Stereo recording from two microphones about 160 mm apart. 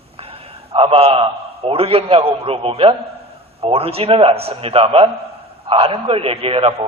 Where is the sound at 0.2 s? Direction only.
40° right (ahead or behind).